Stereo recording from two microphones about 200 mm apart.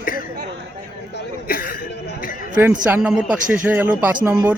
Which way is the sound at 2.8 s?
5° right (ahead or behind).